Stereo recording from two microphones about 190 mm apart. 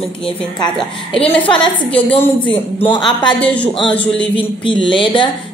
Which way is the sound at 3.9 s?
5° left (ahead or behind).